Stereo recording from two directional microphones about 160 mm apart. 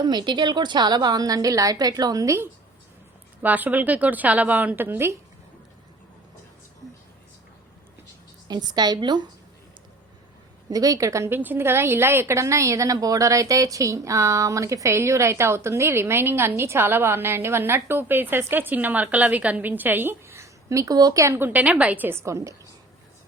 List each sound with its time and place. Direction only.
0.0 s a woman's voice: 30° right (ahead or behind)
8.4 s a woman's voice: 25° right (ahead or behind)
10.7 s a woman's voice: 25° right (ahead or behind)